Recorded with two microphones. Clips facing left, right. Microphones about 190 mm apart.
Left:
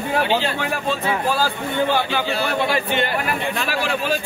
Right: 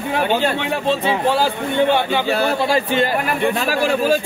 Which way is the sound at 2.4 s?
35° right (ahead or behind).